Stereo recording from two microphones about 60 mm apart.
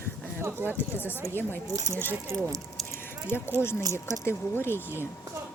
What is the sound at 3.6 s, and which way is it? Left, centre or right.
Speech, left.